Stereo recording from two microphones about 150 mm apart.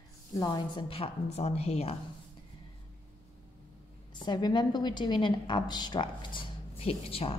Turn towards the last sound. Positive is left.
turn(degrees=40)  # may be behind; listen again after turning